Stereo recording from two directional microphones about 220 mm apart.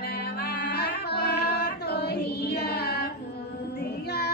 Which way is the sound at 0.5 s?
45° left (ahead or behind).